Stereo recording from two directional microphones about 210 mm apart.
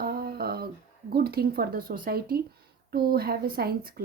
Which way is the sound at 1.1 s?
45° right (ahead or behind).